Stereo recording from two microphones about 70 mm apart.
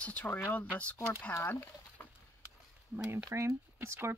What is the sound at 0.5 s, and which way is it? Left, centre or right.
Speech, left.